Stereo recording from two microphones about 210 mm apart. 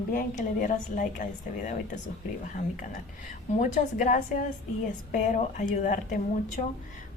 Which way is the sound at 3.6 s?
40° left (ahead or behind).